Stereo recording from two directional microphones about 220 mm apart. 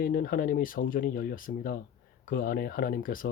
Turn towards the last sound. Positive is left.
turn(degrees=40)  # may be behind; listen again after turning